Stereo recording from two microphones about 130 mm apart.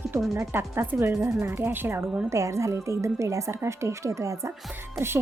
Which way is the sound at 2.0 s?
Centre (ahead or behind).